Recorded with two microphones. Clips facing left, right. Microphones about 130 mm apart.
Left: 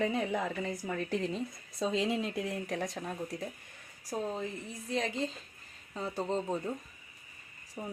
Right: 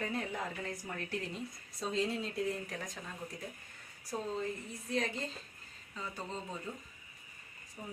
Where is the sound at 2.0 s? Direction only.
90° left; by 3.1 s 65° left (ahead or behind).